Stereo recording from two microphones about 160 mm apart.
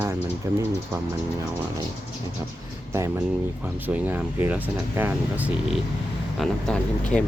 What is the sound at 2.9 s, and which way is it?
Speech, 15° right (ahead or behind).